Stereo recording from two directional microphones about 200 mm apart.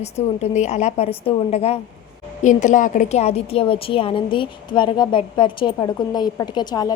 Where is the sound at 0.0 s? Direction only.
35° left (ahead or behind).